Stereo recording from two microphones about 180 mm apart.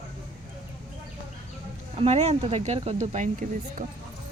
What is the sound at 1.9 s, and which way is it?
Speech, 35° right (ahead or behind).